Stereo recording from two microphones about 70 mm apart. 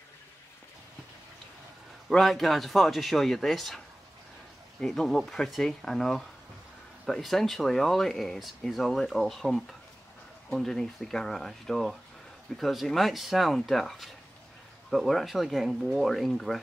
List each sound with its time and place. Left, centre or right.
2.0 s speech: centre